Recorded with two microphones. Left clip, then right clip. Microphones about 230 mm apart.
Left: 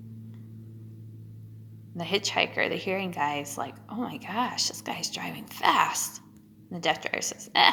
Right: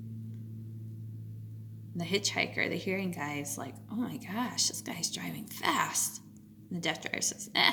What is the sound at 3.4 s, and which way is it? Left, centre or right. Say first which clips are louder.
A woman's voice: left 6 dB; right.